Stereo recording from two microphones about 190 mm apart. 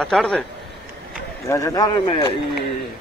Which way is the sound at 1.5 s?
15° left (ahead or behind).